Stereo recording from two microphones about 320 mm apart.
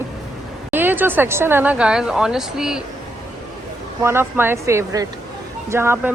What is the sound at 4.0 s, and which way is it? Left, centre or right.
A woman's voice, centre.